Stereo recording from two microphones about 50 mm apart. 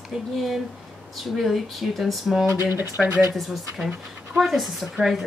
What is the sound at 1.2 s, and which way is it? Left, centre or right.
Speech, centre.